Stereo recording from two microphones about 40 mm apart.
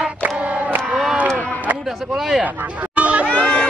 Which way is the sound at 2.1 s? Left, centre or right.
Centre.